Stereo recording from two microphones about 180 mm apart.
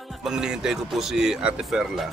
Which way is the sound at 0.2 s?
5° right (ahead or behind).